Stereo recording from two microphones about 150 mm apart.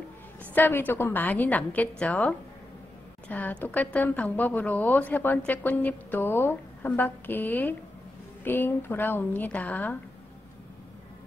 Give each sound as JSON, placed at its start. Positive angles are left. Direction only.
{"t": 0.6, "sound": "a woman's voice", "side_deg": 15}